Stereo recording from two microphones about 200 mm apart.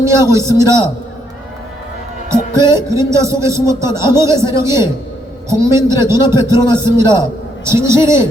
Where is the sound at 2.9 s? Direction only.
15° right (ahead or behind).